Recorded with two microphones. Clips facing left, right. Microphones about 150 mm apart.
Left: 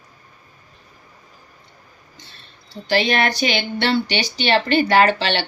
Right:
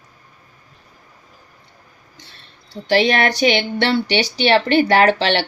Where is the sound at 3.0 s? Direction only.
70° right (ahead or behind).